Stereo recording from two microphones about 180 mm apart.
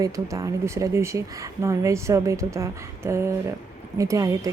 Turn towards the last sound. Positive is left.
turn(degrees=-20)  # may be behind; listen again after turning